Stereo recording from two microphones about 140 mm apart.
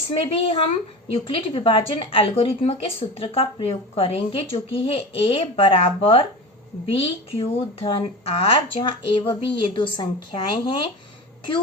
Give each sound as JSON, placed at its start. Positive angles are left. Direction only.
{"t": 0.1, "sound": "speech", "side_deg": 40}